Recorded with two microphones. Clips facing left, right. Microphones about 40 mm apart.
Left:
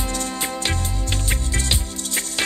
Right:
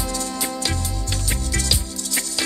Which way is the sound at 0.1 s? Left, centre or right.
Left.